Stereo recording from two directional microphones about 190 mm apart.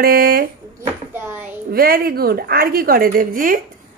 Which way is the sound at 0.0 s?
50° right (ahead or behind).